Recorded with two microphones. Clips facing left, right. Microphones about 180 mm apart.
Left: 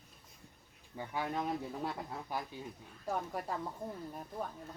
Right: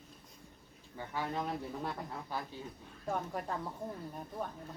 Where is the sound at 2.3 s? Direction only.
15° left (ahead or behind).